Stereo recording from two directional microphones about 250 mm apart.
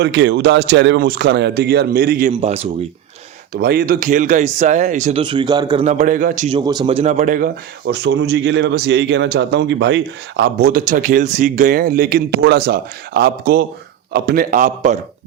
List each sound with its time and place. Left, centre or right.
0.0 s speech: right
2.4 s speech: right
3.5 s speech: right
6.7 s speech: centre